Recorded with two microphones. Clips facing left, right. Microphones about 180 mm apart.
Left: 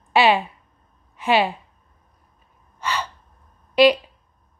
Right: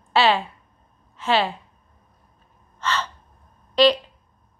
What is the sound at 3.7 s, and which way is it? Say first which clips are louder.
Speech: left 2 dB; 10° left (ahead or behind).